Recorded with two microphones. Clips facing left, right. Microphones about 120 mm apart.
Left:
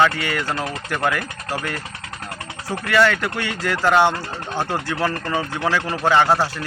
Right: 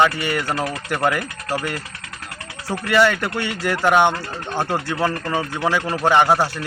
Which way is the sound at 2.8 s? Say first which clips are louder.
Right 1 dB; 20° right (ahead or behind).